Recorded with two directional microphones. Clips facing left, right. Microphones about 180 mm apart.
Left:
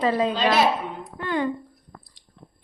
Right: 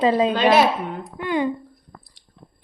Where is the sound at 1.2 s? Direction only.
15° right (ahead or behind).